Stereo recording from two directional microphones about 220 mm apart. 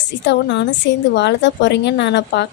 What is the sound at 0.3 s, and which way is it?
A woman's voice, 55° left (ahead or behind).